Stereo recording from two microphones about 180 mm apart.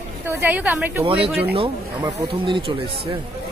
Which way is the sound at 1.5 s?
30° right (ahead or behind).